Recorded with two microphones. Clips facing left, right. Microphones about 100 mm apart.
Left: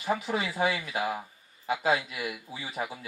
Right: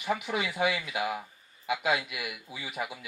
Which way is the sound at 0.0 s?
35° left (ahead or behind).